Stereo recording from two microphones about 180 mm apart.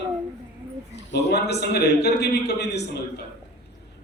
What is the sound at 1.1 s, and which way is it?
A man's voice, 65° left (ahead or behind).